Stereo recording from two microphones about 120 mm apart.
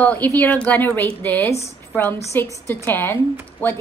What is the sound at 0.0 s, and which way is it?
A woman's voice, 15° left (ahead or behind).